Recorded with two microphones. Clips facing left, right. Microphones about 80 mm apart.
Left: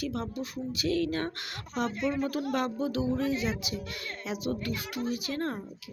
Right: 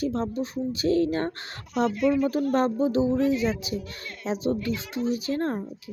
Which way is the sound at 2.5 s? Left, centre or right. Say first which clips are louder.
Right 8 dB; right.